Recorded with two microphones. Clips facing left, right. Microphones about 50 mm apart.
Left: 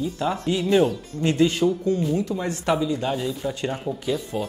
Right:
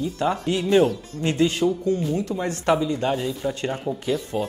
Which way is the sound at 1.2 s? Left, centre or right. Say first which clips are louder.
Left 1 dB; right.